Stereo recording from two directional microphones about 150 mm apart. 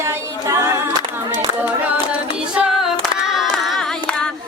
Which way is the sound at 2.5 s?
Centre (ahead or behind).